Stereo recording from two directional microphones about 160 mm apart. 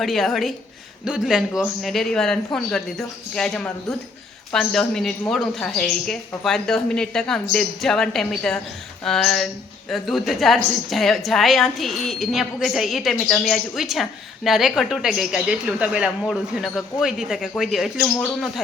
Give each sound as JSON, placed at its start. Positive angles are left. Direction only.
{"t": 0.0, "sound": "a woman's voice", "side_deg": 0}